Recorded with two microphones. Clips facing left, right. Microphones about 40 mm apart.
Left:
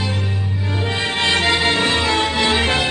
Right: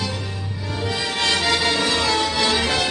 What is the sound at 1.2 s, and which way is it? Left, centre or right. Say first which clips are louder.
Music: left 3 dB; left.